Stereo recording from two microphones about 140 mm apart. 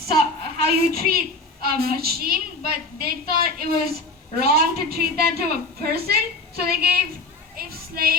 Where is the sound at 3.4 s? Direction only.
90° right.